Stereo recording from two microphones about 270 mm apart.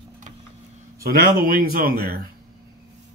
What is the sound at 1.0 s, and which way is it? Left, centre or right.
Speech, right.